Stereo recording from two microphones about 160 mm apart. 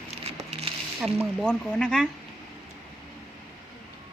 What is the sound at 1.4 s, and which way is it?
Speech, 5° left (ahead or behind).